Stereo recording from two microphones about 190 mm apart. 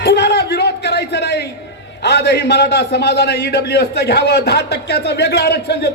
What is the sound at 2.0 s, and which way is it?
A man's voice, 60° left (ahead or behind).